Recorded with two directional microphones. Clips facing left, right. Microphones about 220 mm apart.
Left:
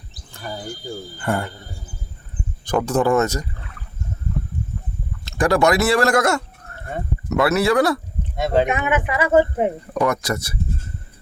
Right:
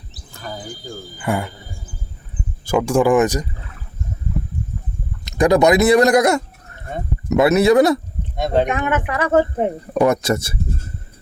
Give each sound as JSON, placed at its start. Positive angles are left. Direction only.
{"t": 0.3, "sound": "cricket", "side_deg": 10}
{"t": 1.2, "sound": "speech", "side_deg": -5}
{"t": 2.6, "sound": "speech", "side_deg": -10}
{"t": 5.2, "sound": "speech", "side_deg": -20}
{"t": 8.4, "sound": "speech", "side_deg": 5}
{"t": 9.9, "sound": "speech", "side_deg": -25}